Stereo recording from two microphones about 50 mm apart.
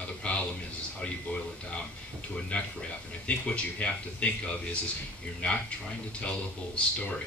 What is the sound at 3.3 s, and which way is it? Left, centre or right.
Speech, left.